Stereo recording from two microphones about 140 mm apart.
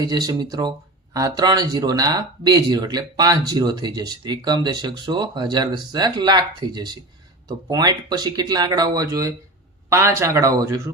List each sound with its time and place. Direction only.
0.0 s speech: 30° right (ahead or behind)